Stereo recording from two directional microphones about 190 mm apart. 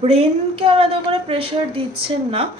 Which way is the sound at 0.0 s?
35° right (ahead or behind).